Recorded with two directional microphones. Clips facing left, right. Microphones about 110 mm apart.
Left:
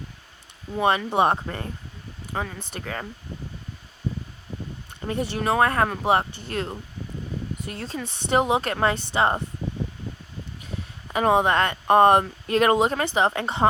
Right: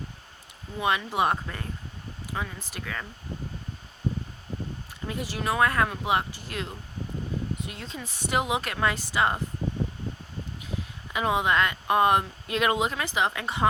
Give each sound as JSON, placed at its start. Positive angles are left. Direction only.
{"t": 0.8, "sound": "speech", "side_deg": 40}
{"t": 5.0, "sound": "speech", "side_deg": 40}
{"t": 11.1, "sound": "speech", "side_deg": 45}